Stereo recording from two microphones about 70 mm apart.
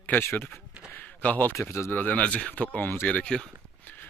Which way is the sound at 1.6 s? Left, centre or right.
Left.